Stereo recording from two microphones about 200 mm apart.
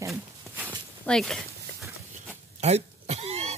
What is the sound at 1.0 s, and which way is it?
Speech, centre (ahead or behind).